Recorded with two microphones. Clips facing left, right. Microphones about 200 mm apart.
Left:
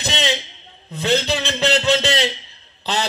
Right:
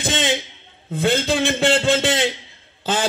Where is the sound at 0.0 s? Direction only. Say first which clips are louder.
Right 1 dB; 50° right (ahead or behind).